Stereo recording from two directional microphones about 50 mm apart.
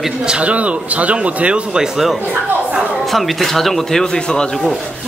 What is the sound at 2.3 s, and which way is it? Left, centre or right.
Speech, right.